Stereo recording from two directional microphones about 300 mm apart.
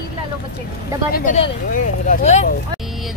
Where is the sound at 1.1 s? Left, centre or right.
Left.